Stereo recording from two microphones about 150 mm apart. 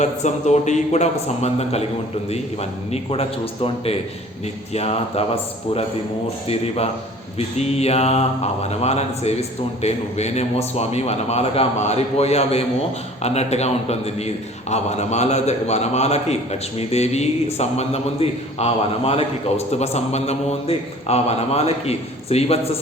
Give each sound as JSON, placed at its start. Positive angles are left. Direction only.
{"t": 0.0, "sound": "a man's voice", "side_deg": 50}